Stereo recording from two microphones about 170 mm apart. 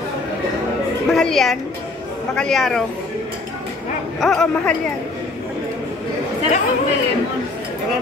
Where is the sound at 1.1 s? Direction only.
Centre (ahead or behind).